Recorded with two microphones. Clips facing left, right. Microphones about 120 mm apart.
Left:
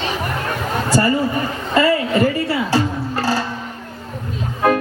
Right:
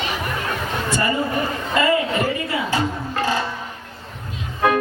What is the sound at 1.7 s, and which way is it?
Music, 35° left (ahead or behind).